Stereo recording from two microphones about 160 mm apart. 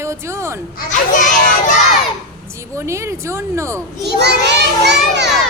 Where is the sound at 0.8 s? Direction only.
50° left (ahead or behind).